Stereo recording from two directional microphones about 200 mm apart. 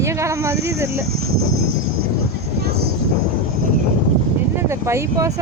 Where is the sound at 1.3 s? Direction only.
90° right.